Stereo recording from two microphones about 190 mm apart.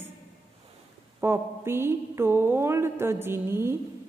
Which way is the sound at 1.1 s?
15° right (ahead or behind).